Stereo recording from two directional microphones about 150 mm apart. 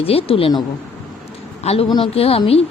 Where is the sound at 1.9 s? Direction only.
35° left (ahead or behind).